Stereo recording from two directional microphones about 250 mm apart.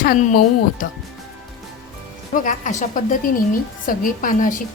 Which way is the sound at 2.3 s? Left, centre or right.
Left.